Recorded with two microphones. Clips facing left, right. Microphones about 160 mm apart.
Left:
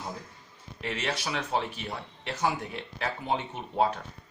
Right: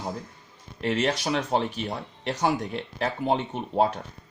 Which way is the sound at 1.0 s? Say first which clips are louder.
Right 6 dB; 40° right (ahead or behind).